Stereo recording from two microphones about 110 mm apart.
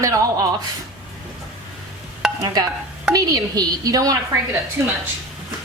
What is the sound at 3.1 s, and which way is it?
A woman's voice, 35° right (ahead or behind).